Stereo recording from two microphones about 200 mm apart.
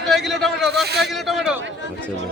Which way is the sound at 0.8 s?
55° right (ahead or behind).